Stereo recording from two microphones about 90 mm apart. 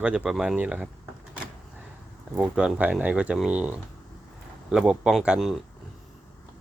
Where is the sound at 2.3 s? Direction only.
5° right (ahead or behind).